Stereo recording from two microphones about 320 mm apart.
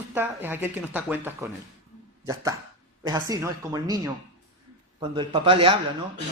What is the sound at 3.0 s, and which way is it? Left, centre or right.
Speech, centre.